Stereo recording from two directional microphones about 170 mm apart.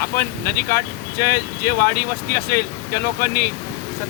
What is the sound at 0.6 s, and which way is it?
Speech, 60° left (ahead or behind).